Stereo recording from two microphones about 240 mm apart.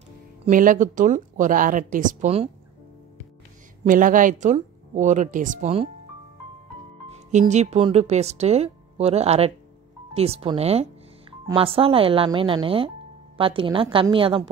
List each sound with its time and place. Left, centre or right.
0.5 s speech: right
3.8 s speech: right
7.3 s a woman's voice: right